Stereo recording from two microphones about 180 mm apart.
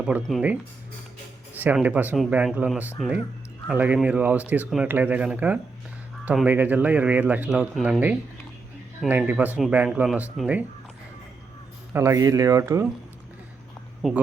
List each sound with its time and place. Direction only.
0.0 s speech: centre (ahead or behind)
11.9 s speech: 15° right (ahead or behind)
14.0 s speech: centre (ahead or behind)